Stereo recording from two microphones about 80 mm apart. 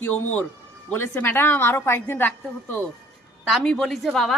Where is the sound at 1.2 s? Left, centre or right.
Left.